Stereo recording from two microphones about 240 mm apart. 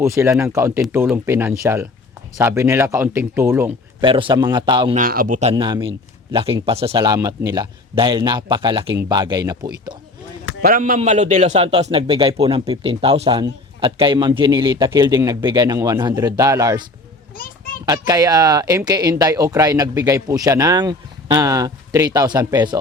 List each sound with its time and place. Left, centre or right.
0.0 s speech: centre
4.0 s a man's voice: right
4.9 s a man's voice: right; by 9.6 s centre
10.6 s a man's voice: right; by 16.8 s centre
17.8 s speech: centre